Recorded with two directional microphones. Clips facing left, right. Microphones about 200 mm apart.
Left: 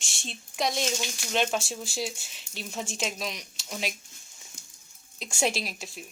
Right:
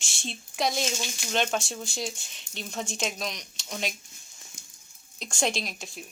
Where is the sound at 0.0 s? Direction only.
Centre (ahead or behind).